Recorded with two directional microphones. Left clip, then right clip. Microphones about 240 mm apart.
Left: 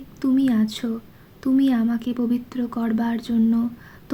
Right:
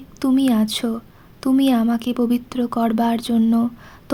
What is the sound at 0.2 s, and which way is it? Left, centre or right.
Speech, right.